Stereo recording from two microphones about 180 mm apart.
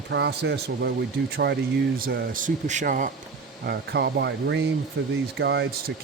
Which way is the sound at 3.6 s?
65° right (ahead or behind).